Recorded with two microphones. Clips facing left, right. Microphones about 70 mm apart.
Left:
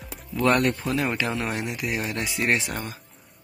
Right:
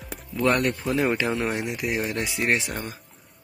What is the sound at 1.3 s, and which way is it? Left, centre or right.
Speech, centre.